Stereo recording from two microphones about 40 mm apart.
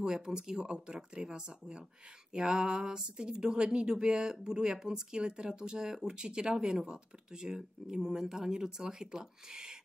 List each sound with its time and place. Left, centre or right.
0.0 s speech: centre